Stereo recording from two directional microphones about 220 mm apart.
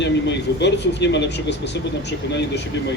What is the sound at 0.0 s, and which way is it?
Speech, 50° left (ahead or behind).